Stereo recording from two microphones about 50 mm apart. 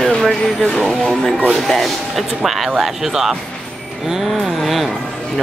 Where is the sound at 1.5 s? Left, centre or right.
Centre.